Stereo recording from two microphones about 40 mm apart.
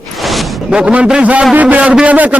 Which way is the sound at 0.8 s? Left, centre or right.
Right.